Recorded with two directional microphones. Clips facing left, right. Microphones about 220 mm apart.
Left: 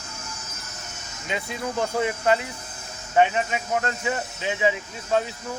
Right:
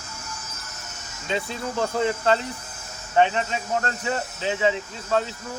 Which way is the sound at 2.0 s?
15° left (ahead or behind).